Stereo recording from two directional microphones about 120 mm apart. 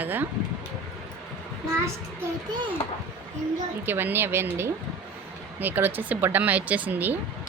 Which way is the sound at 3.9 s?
20° right (ahead or behind).